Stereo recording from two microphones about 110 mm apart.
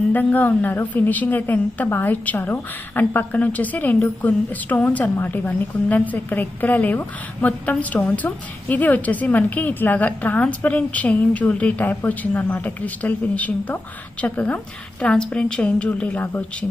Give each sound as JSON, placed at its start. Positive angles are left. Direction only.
{"t": 0.1, "sound": "a woman's voice", "side_deg": 15}